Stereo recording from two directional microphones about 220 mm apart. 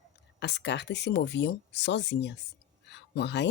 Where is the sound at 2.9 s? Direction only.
50° left (ahead or behind).